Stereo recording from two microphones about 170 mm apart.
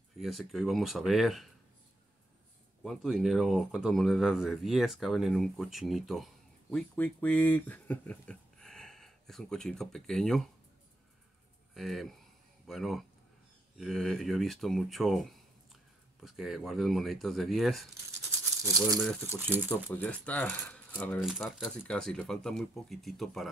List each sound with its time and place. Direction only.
0.2 s speech: centre (ahead or behind)
2.8 s speech: centre (ahead or behind)
11.7 s speech: centre (ahead or behind)
18.4 s rattle: 15° right (ahead or behind)
19.7 s speech: 10° left (ahead or behind)
21.2 s speech: centre (ahead or behind)